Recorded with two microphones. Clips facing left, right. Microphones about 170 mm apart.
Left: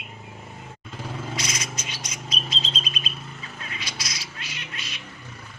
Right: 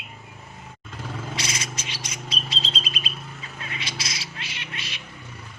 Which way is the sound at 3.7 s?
25° right (ahead or behind).